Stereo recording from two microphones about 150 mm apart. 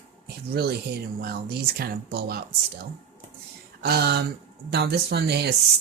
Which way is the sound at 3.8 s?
90° right.